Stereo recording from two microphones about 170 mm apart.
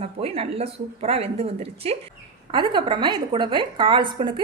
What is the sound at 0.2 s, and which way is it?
A woman's voice, 35° right (ahead or behind).